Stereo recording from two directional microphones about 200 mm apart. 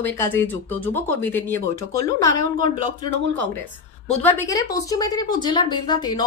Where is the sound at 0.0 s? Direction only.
10° left (ahead or behind).